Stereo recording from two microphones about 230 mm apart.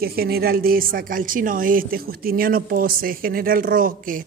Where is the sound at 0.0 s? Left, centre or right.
Right.